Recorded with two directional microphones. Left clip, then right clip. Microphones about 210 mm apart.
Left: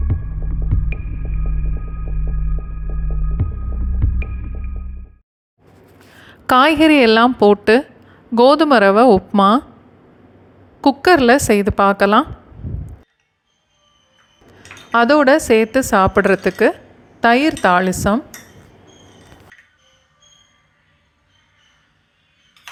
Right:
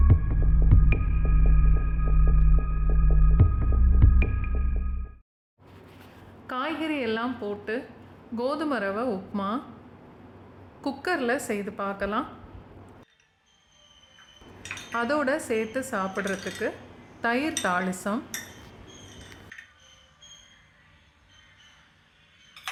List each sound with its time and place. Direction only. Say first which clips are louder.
0.9 s music: right 1 dB; centre (ahead or behind)
3.4 s music: even; centre (ahead or behind)
6.5 s a woman's voice: left 19 dB; 45° left (ahead or behind)
10.8 s a woman's voice: left 16 dB; 35° left (ahead or behind)
14.9 s a woman's voice: left 15 dB; 35° left (ahead or behind)